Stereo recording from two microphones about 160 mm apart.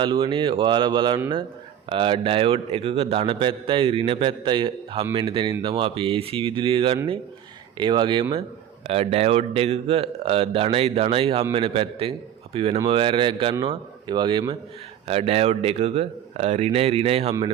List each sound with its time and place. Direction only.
0.0 s a man's voice: 30° right (ahead or behind)